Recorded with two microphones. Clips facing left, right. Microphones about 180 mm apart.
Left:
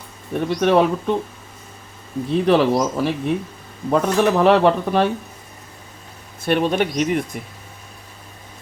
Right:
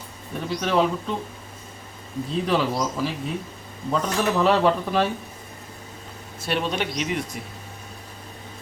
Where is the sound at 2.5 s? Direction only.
65° left (ahead or behind).